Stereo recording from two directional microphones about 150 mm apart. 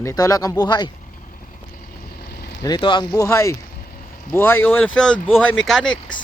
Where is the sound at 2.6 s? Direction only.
30° left (ahead or behind); by 6.0 s 5° left (ahead or behind).